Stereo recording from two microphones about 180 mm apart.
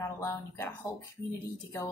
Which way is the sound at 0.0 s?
15° left (ahead or behind).